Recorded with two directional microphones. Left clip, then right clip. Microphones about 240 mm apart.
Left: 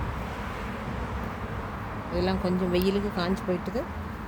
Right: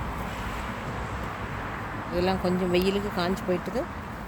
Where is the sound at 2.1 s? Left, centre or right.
Centre.